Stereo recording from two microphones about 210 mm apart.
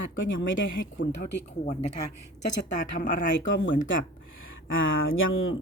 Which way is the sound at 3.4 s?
60° left (ahead or behind).